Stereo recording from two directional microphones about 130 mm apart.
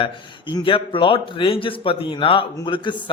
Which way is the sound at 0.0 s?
40° left (ahead or behind).